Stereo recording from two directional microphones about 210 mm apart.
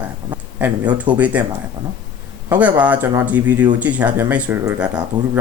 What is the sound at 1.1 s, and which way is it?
Speech, 25° right (ahead or behind).